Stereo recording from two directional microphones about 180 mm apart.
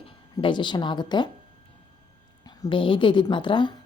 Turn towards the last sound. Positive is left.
turn(degrees=25)  # may be behind; listen again after turning